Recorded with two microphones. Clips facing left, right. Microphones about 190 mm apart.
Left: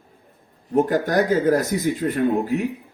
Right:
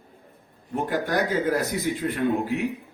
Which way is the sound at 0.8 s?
40° left (ahead or behind).